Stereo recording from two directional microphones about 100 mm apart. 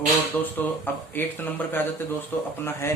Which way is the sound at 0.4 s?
25° left (ahead or behind).